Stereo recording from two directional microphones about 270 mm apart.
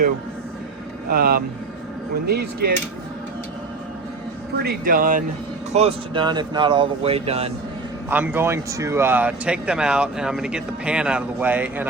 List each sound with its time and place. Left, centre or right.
1.1 s speech: right
4.6 s speech: right
5.7 s speech: centre
8.1 s speech: centre